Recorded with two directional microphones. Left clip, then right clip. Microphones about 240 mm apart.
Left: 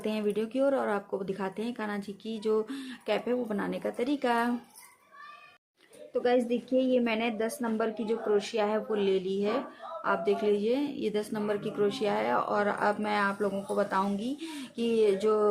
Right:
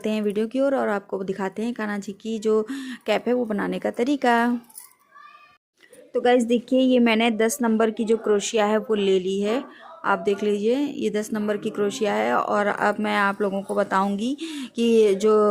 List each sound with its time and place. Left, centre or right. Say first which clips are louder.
0.0 s speech: right 6 dB; right
6.1 s speech: right 8 dB; right